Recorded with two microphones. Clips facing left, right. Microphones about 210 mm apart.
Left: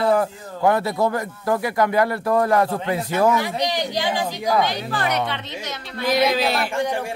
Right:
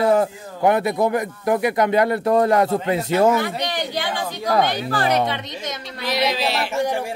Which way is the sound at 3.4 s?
55° right (ahead or behind).